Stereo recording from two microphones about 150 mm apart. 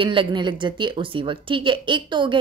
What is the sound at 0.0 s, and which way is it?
Speech, 35° right (ahead or behind).